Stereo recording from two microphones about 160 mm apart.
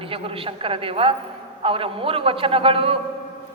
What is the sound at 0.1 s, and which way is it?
A woman's voice, 35° right (ahead or behind).